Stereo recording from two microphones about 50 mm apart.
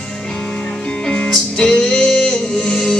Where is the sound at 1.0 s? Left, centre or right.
Centre.